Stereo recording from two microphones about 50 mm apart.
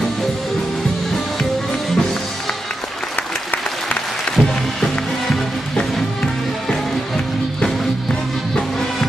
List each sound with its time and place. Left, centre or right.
4.4 s music: left
4.7 s music: centre